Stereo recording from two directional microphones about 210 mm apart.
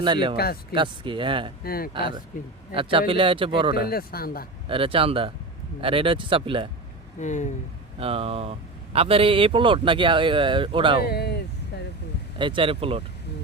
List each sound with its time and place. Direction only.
0.0 s speech: 25° right (ahead or behind)
0.3 s speech: 50° left (ahead or behind)
0.7 s speech: 25° right (ahead or behind)
1.6 s speech: 45° left (ahead or behind)
1.9 s speech: 25° right (ahead or behind)
3.8 s speech: 45° left (ahead or behind)
4.7 s speech: 25° right (ahead or behind)
7.2 s speech: 35° left (ahead or behind)
7.9 s speech: 25° right (ahead or behind)
11.0 s speech: 50° left (ahead or behind)
12.4 s speech: 25° right (ahead or behind)